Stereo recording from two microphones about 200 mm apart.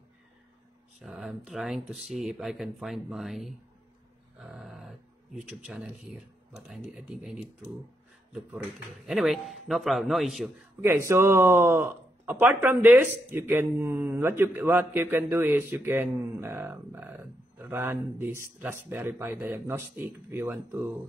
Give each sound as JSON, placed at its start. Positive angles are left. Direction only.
{"t": 1.0, "sound": "speech", "side_deg": 0}
{"t": 9.0, "sound": "speech", "side_deg": 0}
{"t": 10.8, "sound": "speech", "side_deg": -10}